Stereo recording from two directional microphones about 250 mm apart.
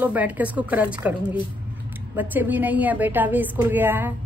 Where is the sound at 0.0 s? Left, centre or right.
Centre.